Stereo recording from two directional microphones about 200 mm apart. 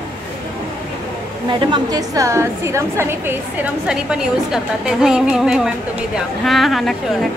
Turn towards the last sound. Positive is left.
turn(degrees=0)  # may be behind; listen again after turning